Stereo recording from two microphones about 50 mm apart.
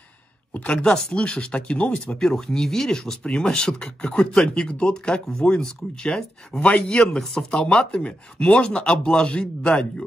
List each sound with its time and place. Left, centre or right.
0.5 s speech: left